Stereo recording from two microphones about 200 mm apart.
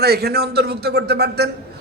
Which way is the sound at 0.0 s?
50° right (ahead or behind).